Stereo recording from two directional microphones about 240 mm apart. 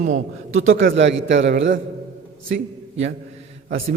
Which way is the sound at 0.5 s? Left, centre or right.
Right.